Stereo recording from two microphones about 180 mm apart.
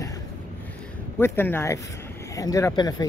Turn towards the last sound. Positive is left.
turn(degrees=20)  # may be behind; listen again after turning